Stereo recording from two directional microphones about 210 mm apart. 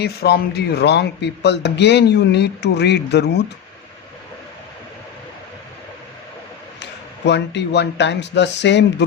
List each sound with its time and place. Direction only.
0.0 s a man's voice: 50° left (ahead or behind)
7.3 s speech: 55° left (ahead or behind)